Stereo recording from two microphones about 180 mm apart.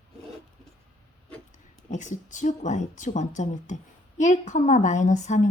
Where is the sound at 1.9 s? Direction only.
45° left (ahead or behind).